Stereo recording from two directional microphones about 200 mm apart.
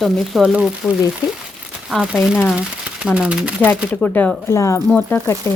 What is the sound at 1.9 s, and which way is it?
A woman's voice, centre (ahead or behind).